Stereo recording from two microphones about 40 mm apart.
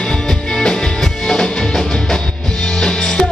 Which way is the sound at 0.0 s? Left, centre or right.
Centre.